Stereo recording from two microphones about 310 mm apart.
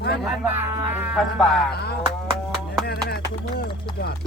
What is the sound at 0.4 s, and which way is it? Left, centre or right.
Speech, centre.